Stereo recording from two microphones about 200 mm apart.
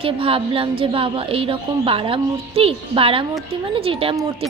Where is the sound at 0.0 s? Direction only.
30° right (ahead or behind).